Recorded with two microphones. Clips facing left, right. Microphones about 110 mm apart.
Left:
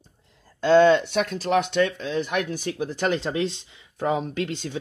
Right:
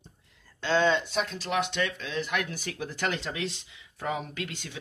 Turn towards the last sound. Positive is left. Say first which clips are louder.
# left 9 dB
turn(degrees=30)  # may be behind; listen again after turning